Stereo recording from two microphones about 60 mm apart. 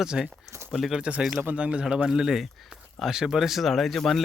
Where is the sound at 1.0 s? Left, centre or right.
Right.